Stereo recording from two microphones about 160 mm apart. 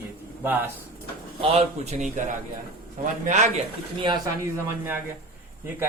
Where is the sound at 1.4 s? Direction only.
40° right (ahead or behind).